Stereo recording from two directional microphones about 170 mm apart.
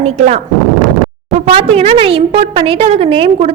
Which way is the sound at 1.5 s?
30° right (ahead or behind).